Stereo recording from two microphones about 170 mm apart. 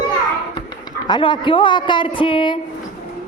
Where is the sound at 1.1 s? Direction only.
30° left (ahead or behind).